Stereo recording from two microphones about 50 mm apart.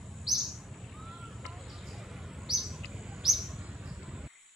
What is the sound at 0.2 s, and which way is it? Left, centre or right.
Bird, centre.